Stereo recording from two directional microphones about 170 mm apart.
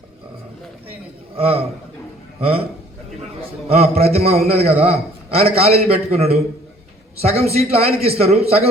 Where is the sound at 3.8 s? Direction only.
40° right (ahead or behind).